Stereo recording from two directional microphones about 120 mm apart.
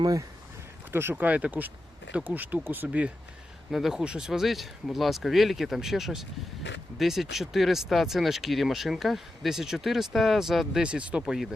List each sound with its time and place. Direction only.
0.0 s speech: 30° right (ahead or behind)
0.9 s speech: 15° right (ahead or behind)
3.7 s speech: centre (ahead or behind)